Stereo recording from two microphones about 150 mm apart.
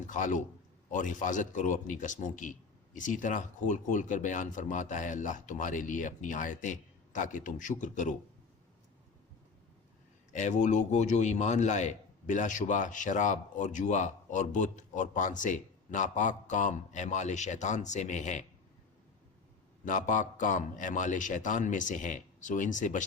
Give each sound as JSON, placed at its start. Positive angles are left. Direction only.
{"t": 0.1, "sound": "a man's voice", "side_deg": 60}
{"t": 10.3, "sound": "a man's voice", "side_deg": 55}
{"t": 19.8, "sound": "a man's voice", "side_deg": 60}